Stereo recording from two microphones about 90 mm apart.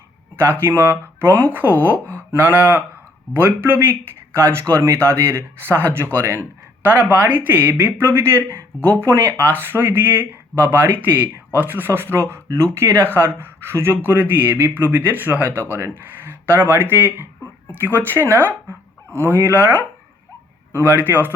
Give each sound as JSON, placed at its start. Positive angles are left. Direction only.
{"t": 0.3, "sound": "speech", "side_deg": -25}
{"t": 20.7, "sound": "speech", "side_deg": -25}